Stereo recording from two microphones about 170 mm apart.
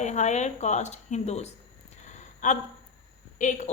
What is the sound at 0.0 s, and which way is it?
A woman's voice, 45° left (ahead or behind).